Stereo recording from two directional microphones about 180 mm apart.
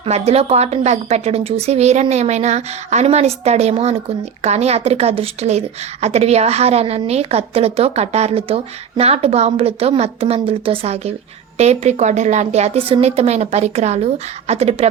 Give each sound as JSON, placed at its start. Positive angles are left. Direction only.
{"t": 0.0, "sound": "a woman's voice", "side_deg": -35}